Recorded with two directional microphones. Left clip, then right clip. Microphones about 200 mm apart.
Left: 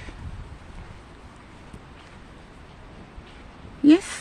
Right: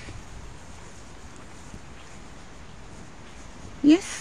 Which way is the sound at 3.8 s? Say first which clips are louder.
Left 2 dB; 25° left (ahead or behind).